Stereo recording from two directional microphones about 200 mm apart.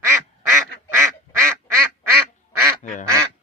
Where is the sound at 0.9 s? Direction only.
15° right (ahead or behind).